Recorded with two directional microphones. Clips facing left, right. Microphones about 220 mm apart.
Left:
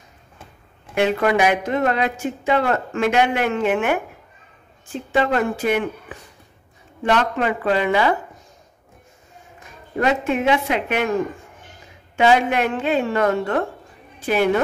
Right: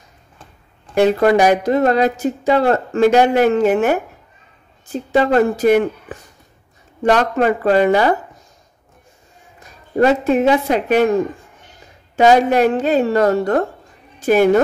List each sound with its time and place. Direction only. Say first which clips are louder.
0.9 s a woman's voice: right 6 dB; 35° right (ahead or behind)
9.6 s a woman's voice: right 8 dB; 35° right (ahead or behind)
12.2 s a woman's voice: right 5 dB; 40° right (ahead or behind)